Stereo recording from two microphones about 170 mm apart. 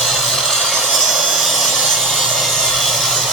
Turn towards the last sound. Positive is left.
turn(degrees=0)  # may be behind; listen again after turning